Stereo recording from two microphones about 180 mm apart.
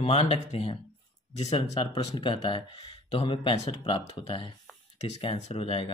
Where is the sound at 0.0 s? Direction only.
35° left (ahead or behind).